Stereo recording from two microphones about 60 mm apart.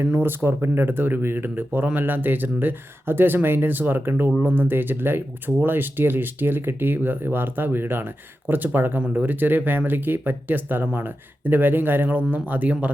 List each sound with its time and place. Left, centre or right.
0.0 s speech: right